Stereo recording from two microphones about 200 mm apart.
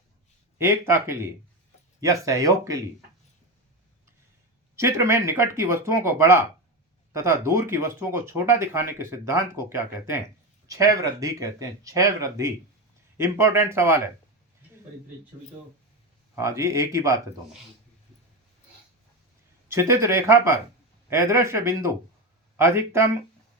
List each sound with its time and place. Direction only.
0.6 s speech: 10° right (ahead or behind)
4.8 s speech: 15° right (ahead or behind)
16.3 s speech: 15° right (ahead or behind)
19.6 s speech: 15° right (ahead or behind)